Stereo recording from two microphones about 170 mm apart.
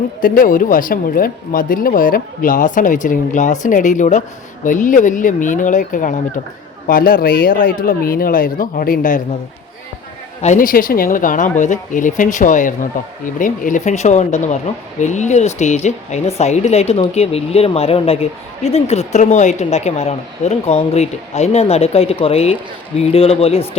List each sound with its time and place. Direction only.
0.2 s speech: 55° left (ahead or behind)
10.4 s speech: 50° left (ahead or behind)